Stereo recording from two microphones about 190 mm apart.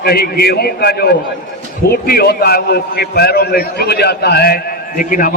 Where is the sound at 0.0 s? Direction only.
55° left (ahead or behind).